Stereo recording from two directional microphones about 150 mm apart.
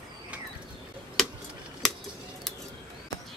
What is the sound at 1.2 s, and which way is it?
Keys jangling, centre (ahead or behind).